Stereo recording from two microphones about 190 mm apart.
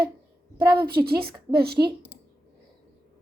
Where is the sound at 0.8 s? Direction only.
55° right (ahead or behind).